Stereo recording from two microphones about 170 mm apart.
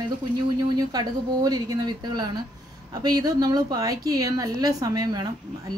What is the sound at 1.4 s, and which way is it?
A woman's voice, 20° right (ahead or behind).